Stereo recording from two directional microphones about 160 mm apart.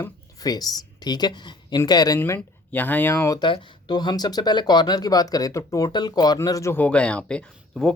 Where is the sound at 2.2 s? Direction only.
10° left (ahead or behind).